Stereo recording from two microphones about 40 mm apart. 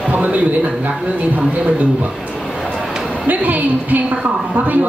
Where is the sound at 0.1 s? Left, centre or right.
Right.